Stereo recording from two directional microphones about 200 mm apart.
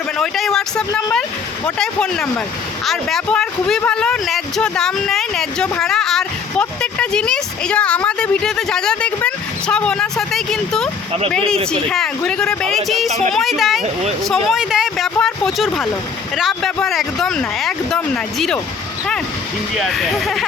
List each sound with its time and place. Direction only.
0.2 s a sound: centre (ahead or behind)
1.6 s speech: 5° left (ahead or behind)
19.7 s speech: centre (ahead or behind)